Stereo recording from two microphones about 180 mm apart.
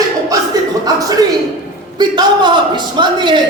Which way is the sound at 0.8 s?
20° right (ahead or behind).